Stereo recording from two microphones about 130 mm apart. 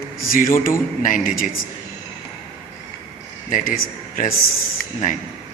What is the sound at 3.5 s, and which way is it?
Speech, 90° left.